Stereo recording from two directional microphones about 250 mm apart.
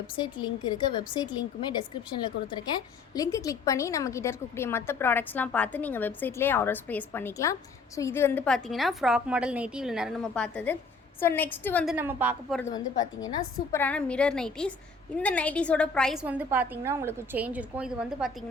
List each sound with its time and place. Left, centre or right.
0.2 s a woman's voice: centre
11.9 s a woman's voice: centre
13.0 s a woman's voice: centre